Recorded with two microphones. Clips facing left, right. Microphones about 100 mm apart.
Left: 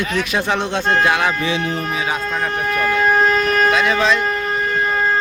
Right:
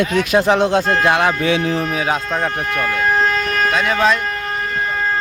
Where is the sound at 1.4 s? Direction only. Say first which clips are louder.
Right 3 dB; 80° right.